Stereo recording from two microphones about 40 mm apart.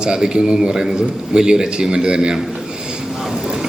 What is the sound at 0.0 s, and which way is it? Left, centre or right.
A man's voice, right.